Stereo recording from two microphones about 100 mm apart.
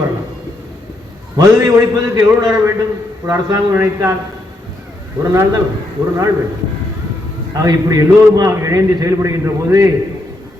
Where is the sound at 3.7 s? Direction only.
25° right (ahead or behind).